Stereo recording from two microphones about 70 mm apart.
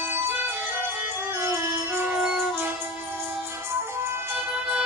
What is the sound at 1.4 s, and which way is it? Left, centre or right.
Music, right.